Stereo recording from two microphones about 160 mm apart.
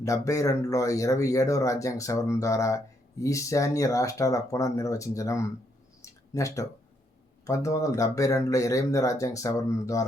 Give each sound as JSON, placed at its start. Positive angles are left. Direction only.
{"t": 0.0, "sound": "speech", "side_deg": 20}
{"t": 6.0, "sound": "a sound", "side_deg": 20}
{"t": 7.4, "sound": "speech", "side_deg": 20}